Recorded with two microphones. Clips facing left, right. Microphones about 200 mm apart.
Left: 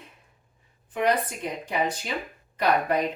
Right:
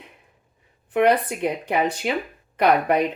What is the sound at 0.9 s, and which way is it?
Speech, 65° right (ahead or behind).